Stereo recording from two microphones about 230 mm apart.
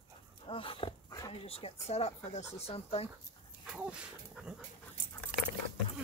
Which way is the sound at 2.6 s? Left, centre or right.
Left.